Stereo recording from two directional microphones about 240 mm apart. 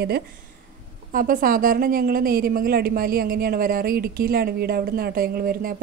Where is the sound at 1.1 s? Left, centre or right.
Right.